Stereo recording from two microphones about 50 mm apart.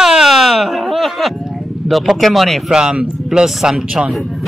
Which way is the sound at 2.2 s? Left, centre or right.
Centre.